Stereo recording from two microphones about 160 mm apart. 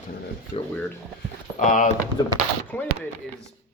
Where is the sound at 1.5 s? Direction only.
50° left (ahead or behind).